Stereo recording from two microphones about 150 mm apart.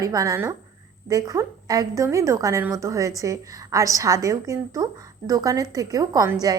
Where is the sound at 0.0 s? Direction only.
20° right (ahead or behind).